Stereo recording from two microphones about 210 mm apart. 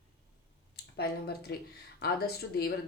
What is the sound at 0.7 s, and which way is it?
Speech, 50° left (ahead or behind).